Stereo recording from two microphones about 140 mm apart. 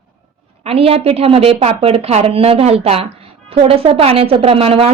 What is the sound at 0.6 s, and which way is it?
Speech, 45° right (ahead or behind).